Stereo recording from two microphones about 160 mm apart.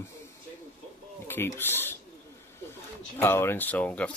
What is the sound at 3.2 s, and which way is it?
Speech, 15° left (ahead or behind).